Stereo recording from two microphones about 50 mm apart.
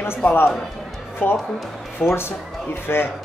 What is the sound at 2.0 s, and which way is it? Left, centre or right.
Speech, left.